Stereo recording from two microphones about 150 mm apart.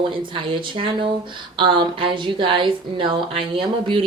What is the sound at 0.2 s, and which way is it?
Speech, 35° right (ahead or behind).